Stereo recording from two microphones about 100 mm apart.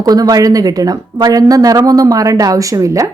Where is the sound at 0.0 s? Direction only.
40° right (ahead or behind).